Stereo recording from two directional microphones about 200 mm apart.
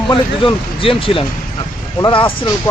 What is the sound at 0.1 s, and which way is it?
Speech, 25° left (ahead or behind).